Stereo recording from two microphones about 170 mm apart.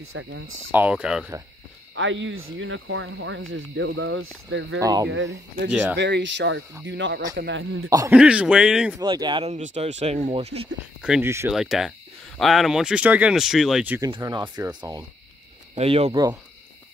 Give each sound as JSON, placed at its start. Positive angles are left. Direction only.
{"t": 0.7, "sound": "speech", "side_deg": -10}
{"t": 2.0, "sound": "speech", "side_deg": -90}
{"t": 5.7, "sound": "speech", "side_deg": -10}
{"t": 5.9, "sound": "speech", "side_deg": -90}
{"t": 8.1, "sound": "speech", "side_deg": -5}
{"t": 9.0, "sound": "speech", "side_deg": -25}
{"t": 9.4, "sound": "speech", "side_deg": -40}
{"t": 11.0, "sound": "speech", "side_deg": -5}
{"t": 11.2, "sound": "speech", "side_deg": -15}
{"t": 11.5, "sound": "speech", "side_deg": 0}
{"t": 14.0, "sound": "speech", "side_deg": -25}
{"t": 15.7, "sound": "speech", "side_deg": -40}
{"t": 16.1, "sound": "speech", "side_deg": -25}